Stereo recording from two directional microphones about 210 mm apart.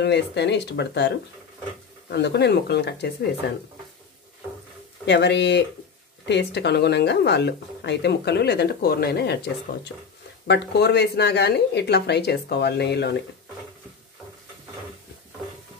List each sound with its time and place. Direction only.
0.0 s speech: 55° left (ahead or behind)
5.0 s speech: 55° left (ahead or behind)